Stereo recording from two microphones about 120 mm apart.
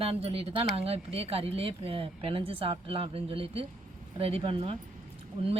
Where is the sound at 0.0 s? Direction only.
55° right (ahead or behind).